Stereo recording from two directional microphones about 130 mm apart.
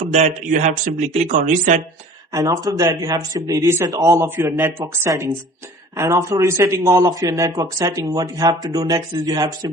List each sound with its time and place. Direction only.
0.1 s speech: 70° right (ahead or behind)
2.3 s a man's voice: 25° right (ahead or behind)